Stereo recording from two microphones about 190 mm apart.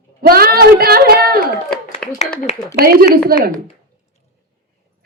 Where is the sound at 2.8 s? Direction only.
55° right (ahead or behind).